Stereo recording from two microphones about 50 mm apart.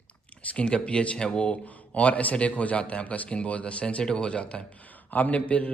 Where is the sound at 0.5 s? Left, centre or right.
Left.